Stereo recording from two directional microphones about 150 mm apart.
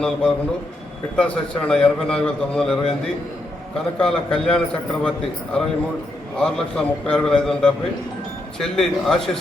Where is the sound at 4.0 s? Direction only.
5° left (ahead or behind).